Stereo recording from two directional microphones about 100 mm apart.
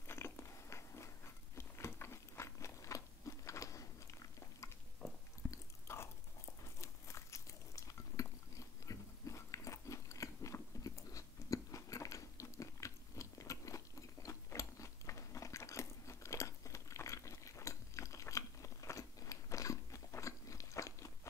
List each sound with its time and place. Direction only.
0.0 s biting: 25° left (ahead or behind)
5.0 s biting: 10° left (ahead or behind)
5.5 s biting: 25° left (ahead or behind)
6.6 s a sound: 30° left (ahead or behind)